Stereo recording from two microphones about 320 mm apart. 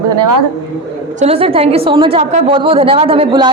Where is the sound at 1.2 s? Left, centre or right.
Centre.